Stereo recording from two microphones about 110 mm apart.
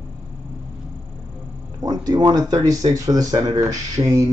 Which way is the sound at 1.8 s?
35° right (ahead or behind).